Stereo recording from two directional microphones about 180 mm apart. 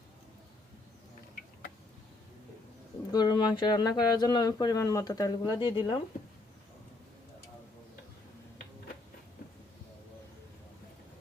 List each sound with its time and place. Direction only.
3.1 s speech: 25° left (ahead or behind)